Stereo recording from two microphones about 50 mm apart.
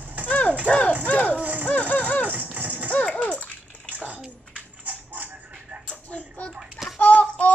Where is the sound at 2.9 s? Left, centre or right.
Left.